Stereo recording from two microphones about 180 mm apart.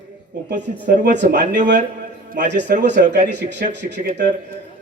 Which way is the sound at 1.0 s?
70° right (ahead or behind).